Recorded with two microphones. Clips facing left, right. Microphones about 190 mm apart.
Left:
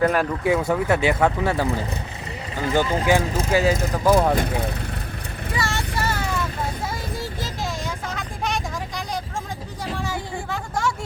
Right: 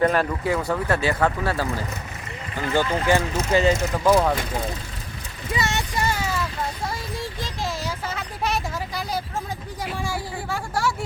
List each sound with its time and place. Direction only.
0.0 s speech: 10° left (ahead or behind)
4.4 s speech: 60° left (ahead or behind)
5.5 s vehicle: 20° right (ahead or behind)
9.8 s speech: 10° right (ahead or behind)